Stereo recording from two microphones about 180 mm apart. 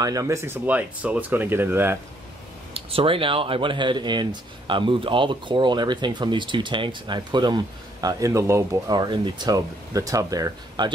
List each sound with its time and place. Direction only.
0.0 s speech: 20° right (ahead or behind)
2.7 s speech: 30° right (ahead or behind)